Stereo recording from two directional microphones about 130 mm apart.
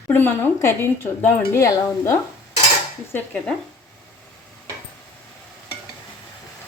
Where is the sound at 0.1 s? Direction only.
15° left (ahead or behind).